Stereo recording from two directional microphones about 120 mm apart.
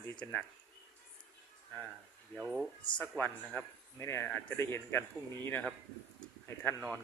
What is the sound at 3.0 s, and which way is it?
Speech, 15° left (ahead or behind).